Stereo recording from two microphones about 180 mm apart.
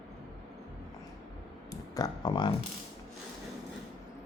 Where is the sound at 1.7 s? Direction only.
20° left (ahead or behind).